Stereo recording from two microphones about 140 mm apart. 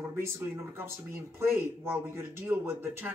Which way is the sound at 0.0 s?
20° right (ahead or behind).